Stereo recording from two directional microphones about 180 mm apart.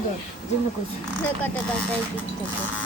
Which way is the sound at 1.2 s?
10° left (ahead or behind).